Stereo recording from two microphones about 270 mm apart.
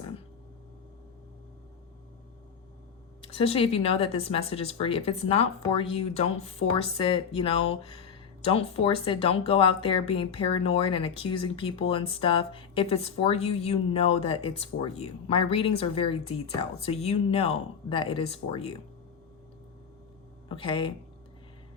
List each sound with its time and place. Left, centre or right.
3.2 s speech: left
20.5 s speech: centre